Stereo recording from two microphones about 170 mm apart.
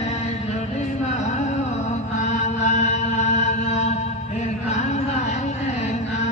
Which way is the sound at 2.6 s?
45° left (ahead or behind).